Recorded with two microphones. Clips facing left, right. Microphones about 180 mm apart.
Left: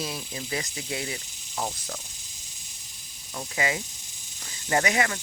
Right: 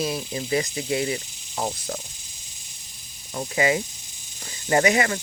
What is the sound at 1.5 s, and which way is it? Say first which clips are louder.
Speech: right 4 dB; 30° right (ahead or behind).